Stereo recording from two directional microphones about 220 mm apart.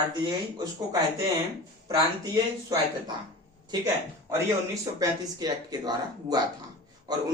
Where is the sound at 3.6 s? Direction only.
15° right (ahead or behind).